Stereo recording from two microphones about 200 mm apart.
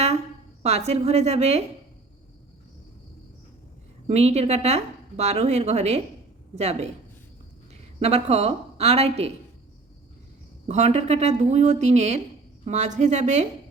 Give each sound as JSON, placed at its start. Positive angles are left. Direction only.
{"t": 0.6, "sound": "a woman's voice", "side_deg": -30}
{"t": 4.0, "sound": "a woman's voice", "side_deg": -30}
{"t": 10.7, "sound": "a woman's voice", "side_deg": -35}